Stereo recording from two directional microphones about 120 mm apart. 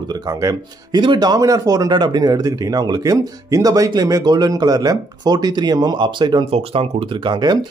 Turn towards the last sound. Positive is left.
turn(degrees=-40)  # may be behind; listen again after turning